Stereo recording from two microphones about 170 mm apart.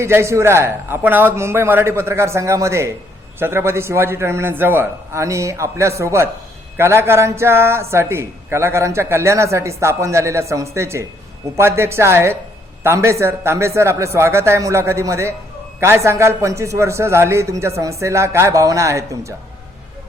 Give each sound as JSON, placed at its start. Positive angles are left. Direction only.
{"t": 0.0, "sound": "a man's voice", "side_deg": -15}